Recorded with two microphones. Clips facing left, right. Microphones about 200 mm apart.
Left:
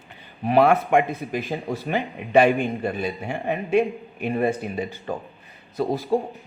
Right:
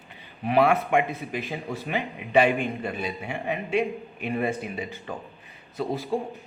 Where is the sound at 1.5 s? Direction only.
45° left (ahead or behind).